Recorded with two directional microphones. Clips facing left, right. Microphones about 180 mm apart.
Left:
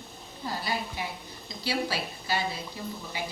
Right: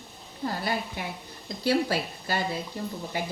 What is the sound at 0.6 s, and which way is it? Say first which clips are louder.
A woman's voice: right 2 dB; 55° right (ahead or behind).